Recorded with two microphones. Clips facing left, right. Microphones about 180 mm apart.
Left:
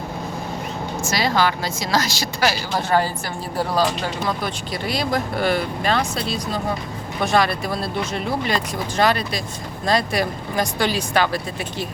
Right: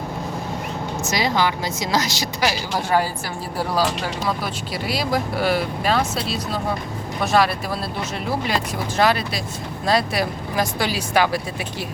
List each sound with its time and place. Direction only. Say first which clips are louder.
1.0 s a woman's voice: left 1 dB; 20° right (ahead or behind)